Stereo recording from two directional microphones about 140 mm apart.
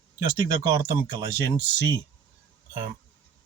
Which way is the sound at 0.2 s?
25° right (ahead or behind).